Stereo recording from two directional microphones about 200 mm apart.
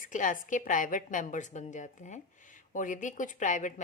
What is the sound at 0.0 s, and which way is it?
A woman's voice, 40° left (ahead or behind).